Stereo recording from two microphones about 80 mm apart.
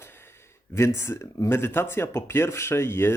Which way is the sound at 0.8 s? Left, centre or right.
Left.